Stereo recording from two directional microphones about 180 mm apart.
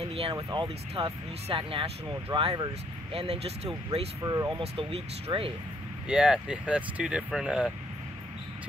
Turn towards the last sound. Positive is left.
turn(degrees=-5)  # may be behind; listen again after turning